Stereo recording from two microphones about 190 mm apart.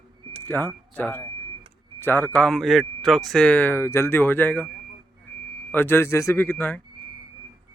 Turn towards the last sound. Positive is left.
turn(degrees=10)  # may be behind; listen again after turning